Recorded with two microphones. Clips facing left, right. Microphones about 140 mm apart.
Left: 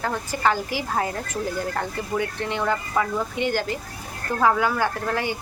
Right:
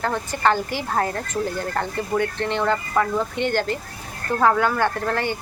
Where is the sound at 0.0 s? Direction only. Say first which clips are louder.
Right 2 dB; 10° left (ahead or behind).